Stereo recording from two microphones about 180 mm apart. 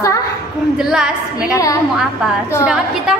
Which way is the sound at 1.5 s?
20° left (ahead or behind).